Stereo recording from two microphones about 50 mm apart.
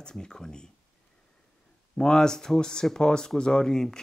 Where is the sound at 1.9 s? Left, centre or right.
Centre.